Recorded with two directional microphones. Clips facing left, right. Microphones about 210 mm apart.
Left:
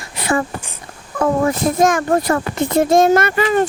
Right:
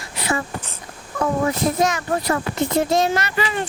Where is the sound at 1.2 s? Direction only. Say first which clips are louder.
Left 4 dB; 50° left (ahead or behind).